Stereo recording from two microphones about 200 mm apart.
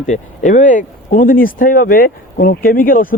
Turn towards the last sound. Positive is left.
turn(degrees=45)  # may be behind; listen again after turning